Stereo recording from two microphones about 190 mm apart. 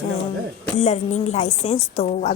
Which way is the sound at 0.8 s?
35° left (ahead or behind).